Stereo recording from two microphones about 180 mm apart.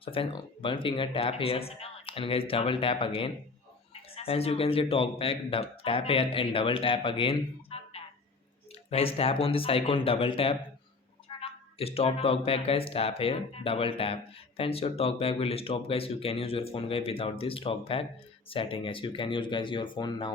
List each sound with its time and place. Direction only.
0.0 s speech: 30° left (ahead or behind)